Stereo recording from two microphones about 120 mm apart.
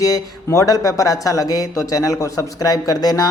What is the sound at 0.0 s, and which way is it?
Speech, 30° left (ahead or behind).